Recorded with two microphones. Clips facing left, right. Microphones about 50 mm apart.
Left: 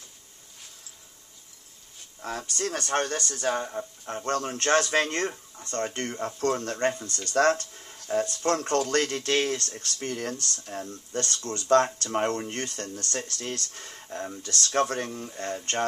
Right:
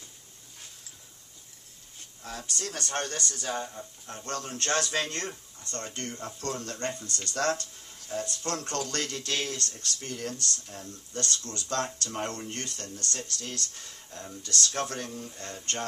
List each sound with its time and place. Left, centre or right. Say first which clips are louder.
2.5 s speech: left 6 dB; left
7.1 s speech: left 1 dB; right
7.3 s speech: left 7 dB; left